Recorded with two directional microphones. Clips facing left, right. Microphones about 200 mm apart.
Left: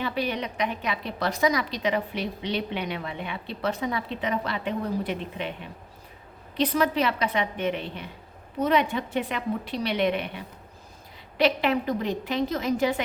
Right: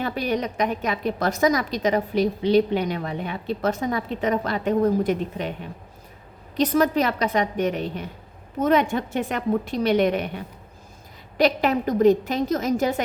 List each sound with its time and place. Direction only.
0.0 s a woman's voice: 45° right (ahead or behind)
6.6 s a woman's voice: 45° right (ahead or behind)